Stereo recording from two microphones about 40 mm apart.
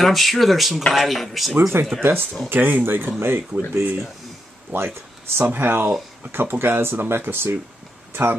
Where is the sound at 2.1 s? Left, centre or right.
Right.